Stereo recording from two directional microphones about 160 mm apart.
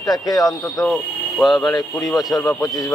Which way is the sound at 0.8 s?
Centre (ahead or behind).